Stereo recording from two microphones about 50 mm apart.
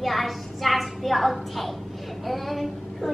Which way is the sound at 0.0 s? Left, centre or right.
Centre.